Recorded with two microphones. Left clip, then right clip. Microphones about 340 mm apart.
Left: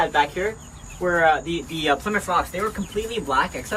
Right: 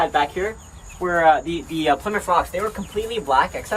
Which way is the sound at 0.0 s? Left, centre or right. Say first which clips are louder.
Right 1 dB; right.